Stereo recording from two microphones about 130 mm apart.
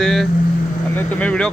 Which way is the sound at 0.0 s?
Centre (ahead or behind).